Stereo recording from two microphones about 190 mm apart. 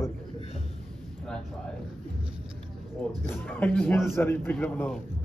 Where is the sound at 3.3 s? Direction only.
10° left (ahead or behind).